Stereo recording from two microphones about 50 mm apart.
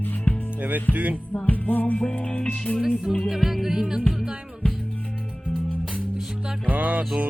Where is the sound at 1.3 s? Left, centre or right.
Left.